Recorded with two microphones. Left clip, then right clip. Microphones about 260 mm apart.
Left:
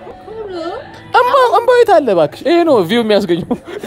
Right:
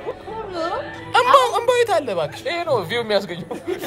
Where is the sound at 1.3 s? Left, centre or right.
Left.